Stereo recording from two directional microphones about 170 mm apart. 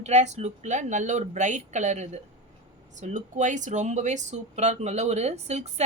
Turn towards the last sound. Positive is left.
turn(degrees=-40)  # may be behind; listen again after turning